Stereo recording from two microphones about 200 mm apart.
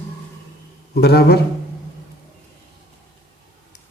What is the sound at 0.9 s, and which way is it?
Speech, 55° left (ahead or behind).